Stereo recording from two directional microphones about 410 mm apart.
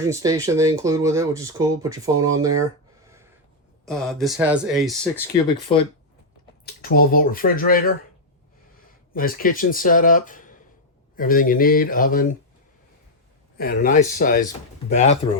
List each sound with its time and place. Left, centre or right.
0.0 s speech: centre
2.1 s speech: right
2.4 s speech: centre
3.8 s speech: centre
5.7 s speech: centre
9.1 s speech: left
13.6 s speech: left